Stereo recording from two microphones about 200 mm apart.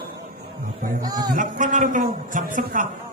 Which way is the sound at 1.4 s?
40° right (ahead or behind).